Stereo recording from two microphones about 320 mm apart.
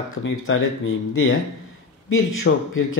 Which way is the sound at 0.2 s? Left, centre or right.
Left.